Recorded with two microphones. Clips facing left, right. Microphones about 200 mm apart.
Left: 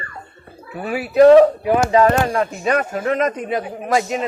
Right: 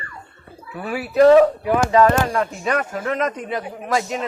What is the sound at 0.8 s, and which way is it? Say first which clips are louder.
A man's voice: left 3 dB; 15° left (ahead or behind).